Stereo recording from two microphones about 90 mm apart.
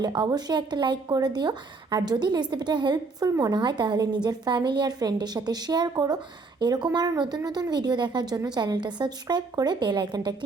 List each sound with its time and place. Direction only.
0.0 s speech: 50° right (ahead or behind)
3.2 s speech: 35° right (ahead or behind)
3.5 s a woman's voice: 55° right (ahead or behind)